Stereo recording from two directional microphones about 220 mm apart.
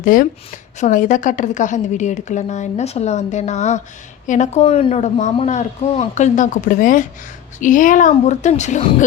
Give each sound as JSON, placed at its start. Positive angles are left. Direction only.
{"t": 0.0, "sound": "a woman's voice", "side_deg": 40}